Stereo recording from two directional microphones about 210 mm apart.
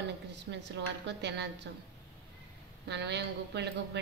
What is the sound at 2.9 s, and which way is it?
A woman's voice, 55° right (ahead or behind).